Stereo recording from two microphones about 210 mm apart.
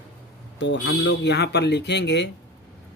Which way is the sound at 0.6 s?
55° left (ahead or behind).